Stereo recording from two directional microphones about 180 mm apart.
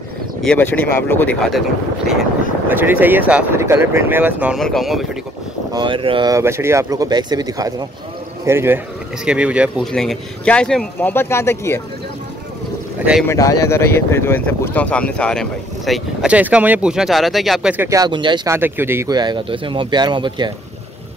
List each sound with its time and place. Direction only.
0.4 s speech: 5° left (ahead or behind)
2.7 s speech: 10° right (ahead or behind)
4.6 s speech: centre (ahead or behind)
5.7 s speech: 25° right (ahead or behind); by 11.8 s 15° left (ahead or behind)
13.3 s speech: 15° left (ahead or behind); by 18.6 s 25° right (ahead or behind)
18.6 s speech: 10° right (ahead or behind)